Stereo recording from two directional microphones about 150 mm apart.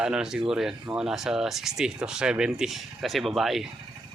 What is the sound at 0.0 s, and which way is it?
Speech, 5° right (ahead or behind).